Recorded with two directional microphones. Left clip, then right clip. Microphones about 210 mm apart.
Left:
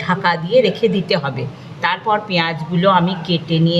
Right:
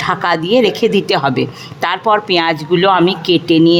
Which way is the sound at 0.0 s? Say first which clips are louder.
Right 3 dB; 45° right (ahead or behind).